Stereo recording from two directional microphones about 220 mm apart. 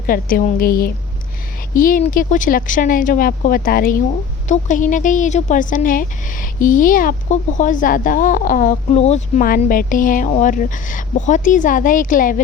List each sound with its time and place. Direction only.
0.1 s a woman's voice: 40° left (ahead or behind)